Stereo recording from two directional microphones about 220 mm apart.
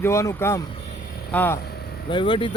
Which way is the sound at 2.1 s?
20° left (ahead or behind).